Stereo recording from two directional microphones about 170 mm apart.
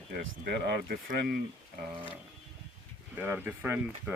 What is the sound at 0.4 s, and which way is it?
Speech, 80° right.